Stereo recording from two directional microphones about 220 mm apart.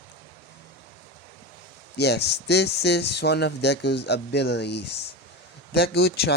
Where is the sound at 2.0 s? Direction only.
50° left (ahead or behind).